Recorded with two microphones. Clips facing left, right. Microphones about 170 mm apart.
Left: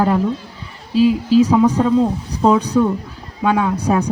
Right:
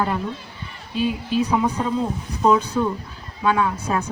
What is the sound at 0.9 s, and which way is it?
Speech, 90° left.